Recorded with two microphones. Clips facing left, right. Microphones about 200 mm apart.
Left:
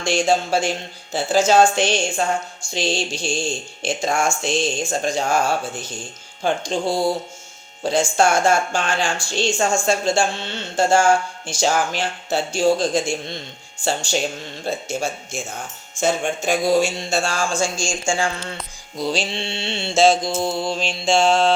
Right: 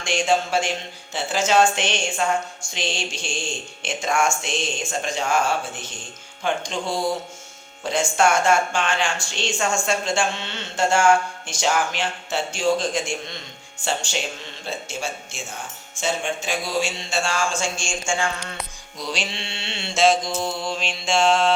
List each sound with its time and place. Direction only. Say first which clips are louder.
0.0 s speech: left 3 dB; 35° left (ahead or behind)
6.4 s speech: left 4 dB; 35° left (ahead or behind)
14.6 s speech: left 6 dB; 40° left (ahead or behind)